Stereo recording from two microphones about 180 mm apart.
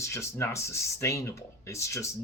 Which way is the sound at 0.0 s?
15° left (ahead or behind).